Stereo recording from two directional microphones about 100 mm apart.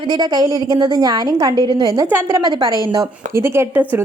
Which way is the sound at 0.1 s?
40° right (ahead or behind).